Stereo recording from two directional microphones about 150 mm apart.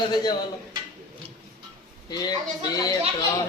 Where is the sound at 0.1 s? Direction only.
25° left (ahead or behind).